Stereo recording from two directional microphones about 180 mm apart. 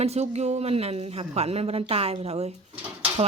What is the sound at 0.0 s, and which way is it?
Speech, 35° right (ahead or behind).